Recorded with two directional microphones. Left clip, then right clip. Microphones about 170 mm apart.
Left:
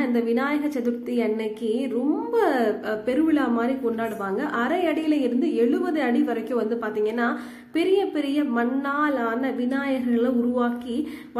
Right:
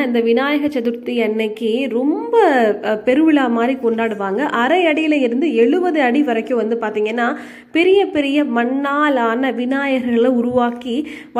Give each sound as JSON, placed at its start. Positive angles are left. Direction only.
{"t": 0.0, "sound": "a woman's voice", "side_deg": -20}